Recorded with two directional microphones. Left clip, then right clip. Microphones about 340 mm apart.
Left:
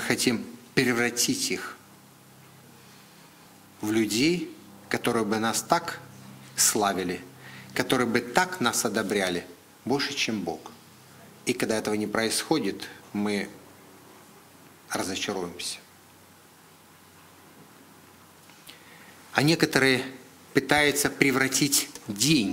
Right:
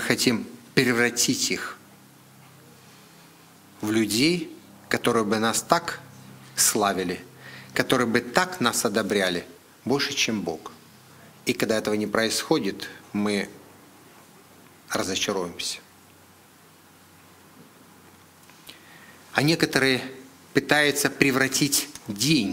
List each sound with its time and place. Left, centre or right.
0.0 s speech: centre
3.8 s speech: centre
14.9 s speech: right
19.3 s a man's voice: centre
20.6 s speech: centre